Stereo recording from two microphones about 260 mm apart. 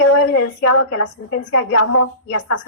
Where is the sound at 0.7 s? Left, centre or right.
Left.